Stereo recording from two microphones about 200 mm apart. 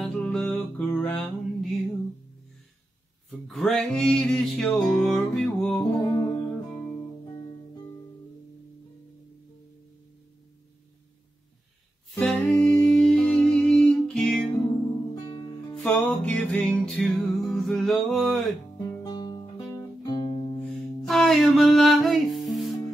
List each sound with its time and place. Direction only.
0.0 s music: centre (ahead or behind)
3.3 s music: centre (ahead or behind)
6.0 s music: 15° left (ahead or behind)
12.1 s music: 5° left (ahead or behind)
15.7 s music: 5° left (ahead or behind)
19.0 s guitar: 20° left (ahead or behind)
20.6 s music: centre (ahead or behind)